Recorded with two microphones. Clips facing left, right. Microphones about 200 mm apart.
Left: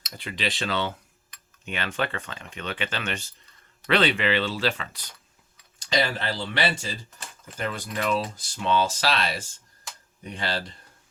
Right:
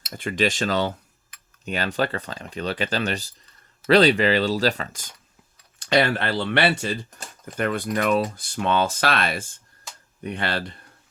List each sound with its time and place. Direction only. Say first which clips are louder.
0.1 s speech: right 8 dB; 50° right (ahead or behind)
5.8 s speech: right 5 dB; 60° right (ahead or behind)